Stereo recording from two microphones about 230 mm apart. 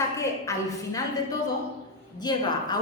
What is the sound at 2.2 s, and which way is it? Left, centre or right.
Speech, centre.